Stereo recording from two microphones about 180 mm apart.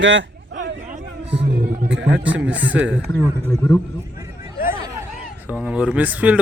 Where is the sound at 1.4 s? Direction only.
55° right (ahead or behind).